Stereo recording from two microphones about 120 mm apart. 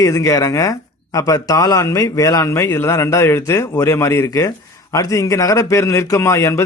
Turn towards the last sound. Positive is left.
turn(degrees=25)  # may be behind; listen again after turning